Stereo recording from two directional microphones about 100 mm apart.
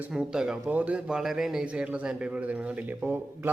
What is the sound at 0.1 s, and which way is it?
A man's voice, 5° right (ahead or behind).